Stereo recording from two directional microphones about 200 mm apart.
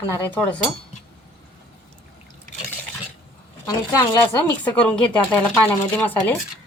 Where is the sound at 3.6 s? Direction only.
20° left (ahead or behind).